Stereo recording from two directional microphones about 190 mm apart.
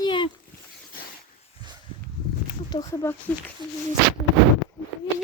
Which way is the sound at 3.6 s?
25° right (ahead or behind).